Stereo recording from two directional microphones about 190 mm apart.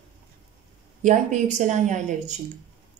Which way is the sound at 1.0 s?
40° right (ahead or behind).